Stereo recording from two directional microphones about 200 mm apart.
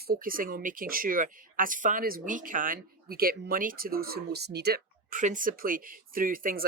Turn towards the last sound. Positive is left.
turn(degrees=-45)  # may be behind; listen again after turning